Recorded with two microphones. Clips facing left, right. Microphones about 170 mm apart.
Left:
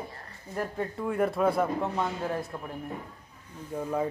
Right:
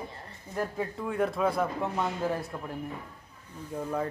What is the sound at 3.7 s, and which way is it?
Speech, 5° left (ahead or behind).